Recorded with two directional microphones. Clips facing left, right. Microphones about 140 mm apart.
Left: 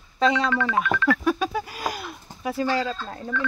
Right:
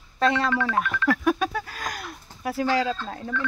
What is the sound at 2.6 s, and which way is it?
Speech, 10° right (ahead or behind).